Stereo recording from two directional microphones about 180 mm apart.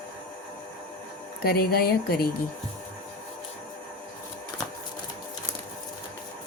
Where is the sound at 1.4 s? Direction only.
60° left (ahead or behind).